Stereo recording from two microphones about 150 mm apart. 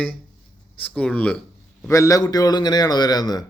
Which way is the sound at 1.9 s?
20° left (ahead or behind).